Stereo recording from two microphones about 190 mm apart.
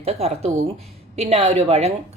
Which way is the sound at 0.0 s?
35° right (ahead or behind).